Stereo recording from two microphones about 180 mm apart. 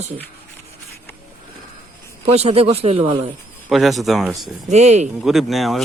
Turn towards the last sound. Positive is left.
turn(degrees=0)  # may be behind; listen again after turning